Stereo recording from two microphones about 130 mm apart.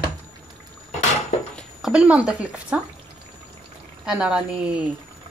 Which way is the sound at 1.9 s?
10° right (ahead or behind).